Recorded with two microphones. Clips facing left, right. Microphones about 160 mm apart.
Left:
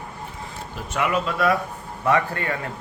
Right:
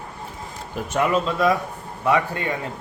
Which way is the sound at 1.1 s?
20° right (ahead or behind).